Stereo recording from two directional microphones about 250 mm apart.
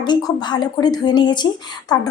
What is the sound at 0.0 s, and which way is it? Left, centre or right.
A woman's voice, centre.